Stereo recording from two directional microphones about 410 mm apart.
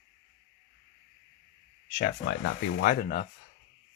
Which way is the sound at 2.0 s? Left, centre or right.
Left.